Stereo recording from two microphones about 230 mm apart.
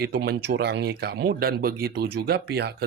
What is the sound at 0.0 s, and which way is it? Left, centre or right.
Speech, right.